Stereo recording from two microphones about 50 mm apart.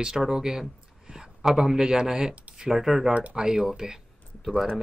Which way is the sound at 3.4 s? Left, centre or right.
Centre.